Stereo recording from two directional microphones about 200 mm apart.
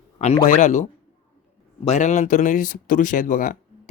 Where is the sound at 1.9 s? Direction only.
35° left (ahead or behind).